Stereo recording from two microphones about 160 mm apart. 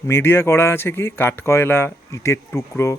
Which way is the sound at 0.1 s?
15° left (ahead or behind).